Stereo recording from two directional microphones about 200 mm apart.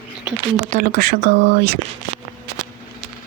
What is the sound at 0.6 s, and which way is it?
Speech, 45° right (ahead or behind).